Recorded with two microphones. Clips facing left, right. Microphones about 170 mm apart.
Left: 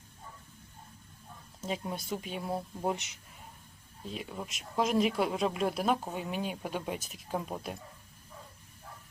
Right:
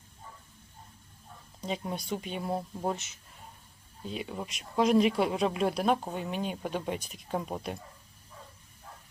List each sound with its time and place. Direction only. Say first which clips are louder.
1.6 s speech: right 1 dB; centre (ahead or behind)
2.9 s speech: even; 15° left (ahead or behind)
4.0 s speech: right 3 dB; centre (ahead or behind)